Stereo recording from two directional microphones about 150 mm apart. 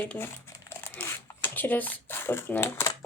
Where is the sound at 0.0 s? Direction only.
15° left (ahead or behind).